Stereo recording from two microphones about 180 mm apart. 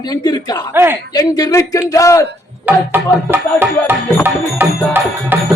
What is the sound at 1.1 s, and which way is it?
A man's voice, 20° left (ahead or behind).